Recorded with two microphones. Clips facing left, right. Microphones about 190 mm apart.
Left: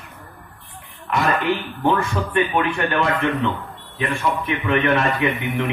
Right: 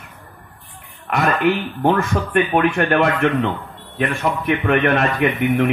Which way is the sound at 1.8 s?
55° right (ahead or behind).